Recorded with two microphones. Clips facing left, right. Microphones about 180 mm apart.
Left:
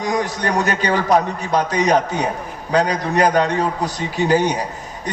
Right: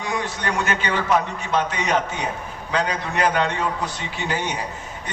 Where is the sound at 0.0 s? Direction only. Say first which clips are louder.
Left 5 dB; 40° left (ahead or behind).